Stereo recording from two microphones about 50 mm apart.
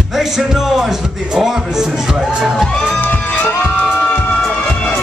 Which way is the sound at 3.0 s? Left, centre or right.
Left.